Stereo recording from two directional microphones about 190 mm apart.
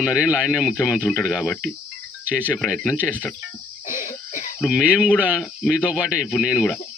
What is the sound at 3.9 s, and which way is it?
Cough, 40° left (ahead or behind).